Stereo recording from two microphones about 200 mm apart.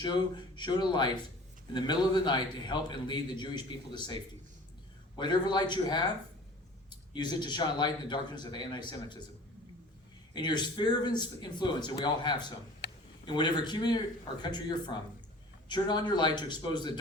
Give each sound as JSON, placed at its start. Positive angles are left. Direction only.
{"t": 0.0, "sound": "a man's voice", "side_deg": 20}
{"t": 7.1, "sound": "a man's voice", "side_deg": 20}
{"t": 10.3, "sound": "a man's voice", "side_deg": 20}
{"t": 12.8, "sound": "a sound", "side_deg": 60}
{"t": 13.2, "sound": "a man's voice", "side_deg": 20}